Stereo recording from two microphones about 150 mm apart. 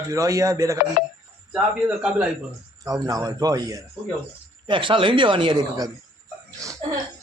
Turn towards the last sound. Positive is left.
turn(degrees=-20)  # may be behind; listen again after turning